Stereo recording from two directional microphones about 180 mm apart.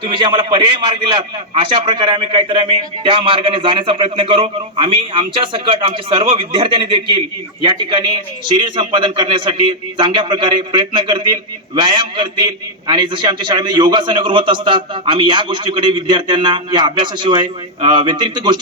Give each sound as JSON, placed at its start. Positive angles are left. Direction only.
{"t": 0.0, "sound": "a man's voice", "side_deg": -25}